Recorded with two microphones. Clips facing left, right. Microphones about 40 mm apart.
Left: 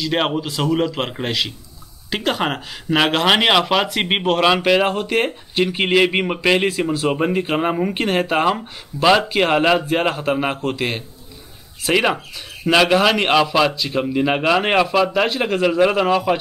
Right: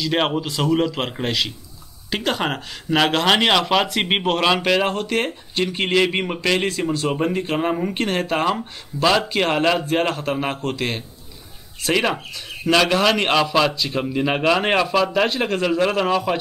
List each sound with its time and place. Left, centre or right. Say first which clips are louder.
0.0 s a man's voice: left 1 dB; centre